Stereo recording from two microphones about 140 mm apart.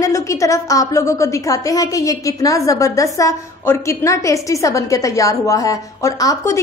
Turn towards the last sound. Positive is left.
turn(degrees=25)  # may be behind; listen again after turning